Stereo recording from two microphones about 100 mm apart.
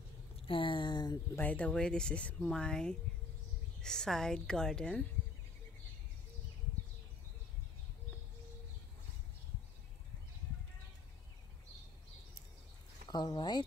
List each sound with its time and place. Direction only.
0.4 s a sound: 60° left (ahead or behind)
1.3 s speech: 15° left (ahead or behind)
13.1 s speech: 45° left (ahead or behind)